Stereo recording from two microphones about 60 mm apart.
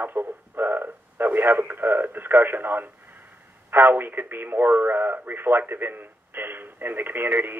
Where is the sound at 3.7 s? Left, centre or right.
Right.